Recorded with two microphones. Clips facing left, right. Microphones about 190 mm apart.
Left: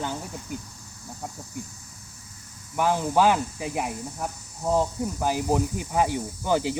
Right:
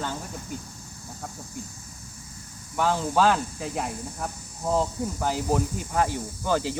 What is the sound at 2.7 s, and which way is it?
Speech, 15° left (ahead or behind).